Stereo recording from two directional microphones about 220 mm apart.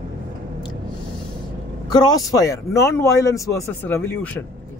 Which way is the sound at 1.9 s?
15° left (ahead or behind).